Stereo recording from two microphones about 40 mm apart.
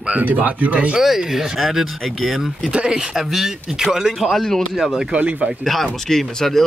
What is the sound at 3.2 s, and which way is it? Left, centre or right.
Speech, centre.